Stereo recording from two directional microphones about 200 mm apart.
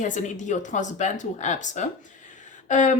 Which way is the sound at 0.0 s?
35° left (ahead or behind).